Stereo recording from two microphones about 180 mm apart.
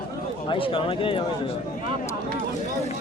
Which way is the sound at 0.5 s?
30° left (ahead or behind).